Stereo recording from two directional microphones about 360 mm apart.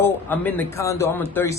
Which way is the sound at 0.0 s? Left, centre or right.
Centre.